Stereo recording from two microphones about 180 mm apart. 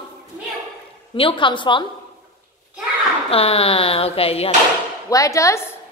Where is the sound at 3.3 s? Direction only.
30° left (ahead or behind).